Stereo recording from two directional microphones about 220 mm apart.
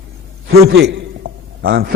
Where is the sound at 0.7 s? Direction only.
50° right (ahead or behind).